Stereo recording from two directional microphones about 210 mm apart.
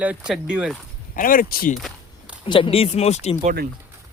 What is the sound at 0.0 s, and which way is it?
Speech, 5° right (ahead or behind).